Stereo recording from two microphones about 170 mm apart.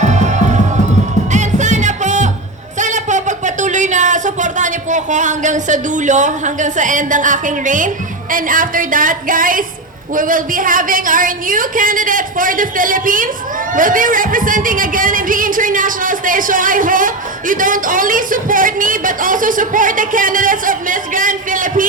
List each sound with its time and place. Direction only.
0.0 s music: 45° right (ahead or behind)
2.7 s a sound: 45° right (ahead or behind)
8.3 s speech: 55° right (ahead or behind)